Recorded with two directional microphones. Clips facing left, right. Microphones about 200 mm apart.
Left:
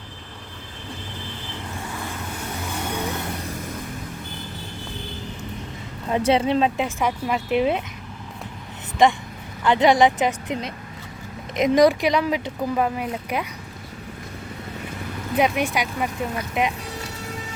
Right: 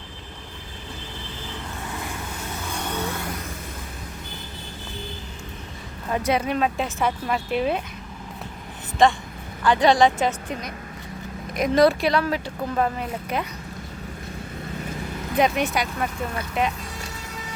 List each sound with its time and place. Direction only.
2.8 s vehicle: 15° left (ahead or behind)
6.1 s speech: 25° left (ahead or behind)
9.6 s speech: 20° left (ahead or behind)
15.4 s speech: 10° left (ahead or behind)